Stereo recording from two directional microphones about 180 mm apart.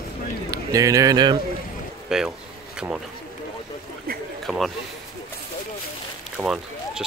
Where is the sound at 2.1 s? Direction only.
5° right (ahead or behind).